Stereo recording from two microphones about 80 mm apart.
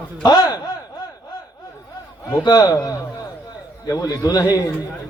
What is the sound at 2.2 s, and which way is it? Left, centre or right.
A man's voice, left.